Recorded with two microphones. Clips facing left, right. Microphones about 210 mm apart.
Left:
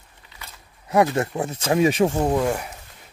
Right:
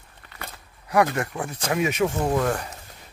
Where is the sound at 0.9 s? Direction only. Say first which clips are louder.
Left 3 dB; 25° left (ahead or behind).